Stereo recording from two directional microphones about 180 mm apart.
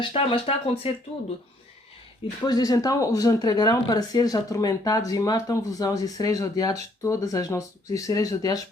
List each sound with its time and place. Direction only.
0.0 s speech: 30° left (ahead or behind)
2.4 s speech: 20° left (ahead or behind)